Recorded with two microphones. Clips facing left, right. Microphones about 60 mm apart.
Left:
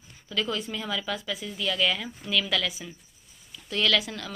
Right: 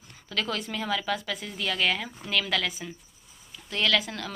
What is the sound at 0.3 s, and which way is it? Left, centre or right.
A woman's voice, right.